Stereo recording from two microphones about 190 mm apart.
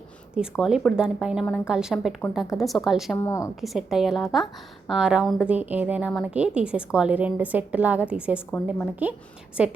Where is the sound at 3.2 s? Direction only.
15° left (ahead or behind).